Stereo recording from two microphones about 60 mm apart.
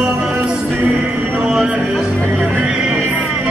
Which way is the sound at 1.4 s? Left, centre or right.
Centre.